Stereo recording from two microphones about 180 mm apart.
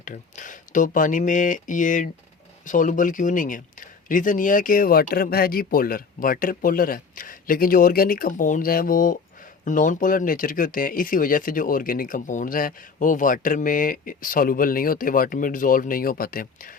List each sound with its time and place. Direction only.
0.0 s speech: 45° left (ahead or behind)